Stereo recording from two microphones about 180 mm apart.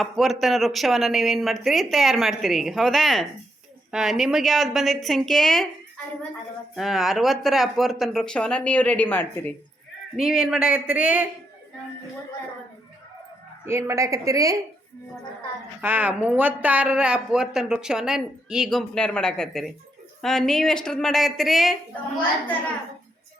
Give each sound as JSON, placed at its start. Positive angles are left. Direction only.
{"t": 0.0, "sound": "speech", "side_deg": 0}
{"t": 6.7, "sound": "speech", "side_deg": 0}
{"t": 10.2, "sound": "speech", "side_deg": -5}
{"t": 13.7, "sound": "a woman's voice", "side_deg": -15}
{"t": 15.8, "sound": "speech", "side_deg": -10}